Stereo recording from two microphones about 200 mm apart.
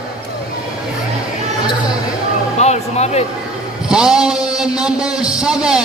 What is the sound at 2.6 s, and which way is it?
Speech, 35° left (ahead or behind).